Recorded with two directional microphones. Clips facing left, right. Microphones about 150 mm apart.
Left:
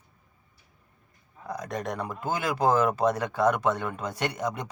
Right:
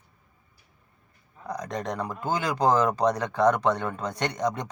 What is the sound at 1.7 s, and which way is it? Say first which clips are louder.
Speech: even; 20° right (ahead or behind).